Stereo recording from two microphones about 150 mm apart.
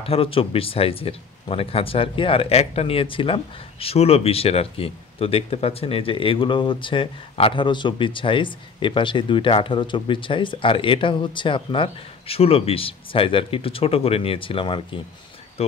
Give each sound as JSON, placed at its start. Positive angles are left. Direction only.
{"t": 0.0, "sound": "speech", "side_deg": 40}